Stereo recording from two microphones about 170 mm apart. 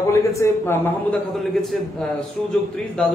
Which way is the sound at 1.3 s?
Centre (ahead or behind).